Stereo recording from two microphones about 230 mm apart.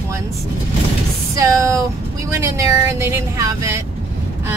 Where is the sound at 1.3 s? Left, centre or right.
Centre.